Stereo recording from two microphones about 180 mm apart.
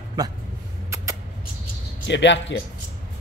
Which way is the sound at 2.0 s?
80° left.